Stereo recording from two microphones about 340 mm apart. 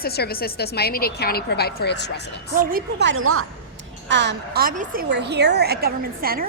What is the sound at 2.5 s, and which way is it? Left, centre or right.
A woman's voice, right.